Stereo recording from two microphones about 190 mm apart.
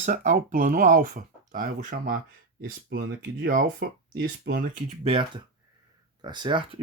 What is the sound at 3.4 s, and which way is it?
Speech, 50° right (ahead or behind).